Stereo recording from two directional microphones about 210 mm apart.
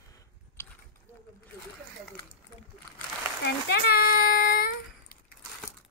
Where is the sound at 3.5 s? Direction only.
50° left (ahead or behind).